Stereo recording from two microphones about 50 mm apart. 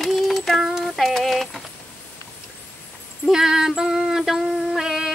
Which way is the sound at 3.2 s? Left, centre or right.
Centre.